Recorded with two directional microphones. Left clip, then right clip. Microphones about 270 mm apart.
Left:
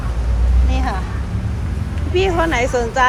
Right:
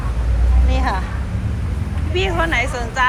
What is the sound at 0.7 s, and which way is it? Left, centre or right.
Vehicle, centre.